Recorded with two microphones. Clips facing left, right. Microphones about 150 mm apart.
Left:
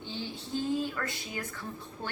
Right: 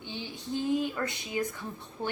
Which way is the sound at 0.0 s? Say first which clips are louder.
Left 1 dB; 15° right (ahead or behind).